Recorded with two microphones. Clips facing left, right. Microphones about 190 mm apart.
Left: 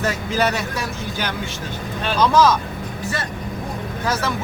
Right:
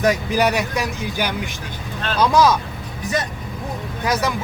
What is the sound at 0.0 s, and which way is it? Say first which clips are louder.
Speech: right 3 dB; 15° right (ahead or behind).